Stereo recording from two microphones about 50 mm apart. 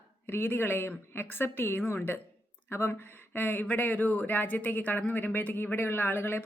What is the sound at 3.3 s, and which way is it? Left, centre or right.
A woman's voice, left.